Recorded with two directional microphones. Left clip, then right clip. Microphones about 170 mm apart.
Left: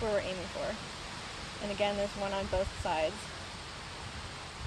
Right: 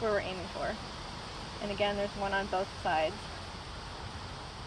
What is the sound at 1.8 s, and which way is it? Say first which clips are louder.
Speech: even; 35° left (ahead or behind).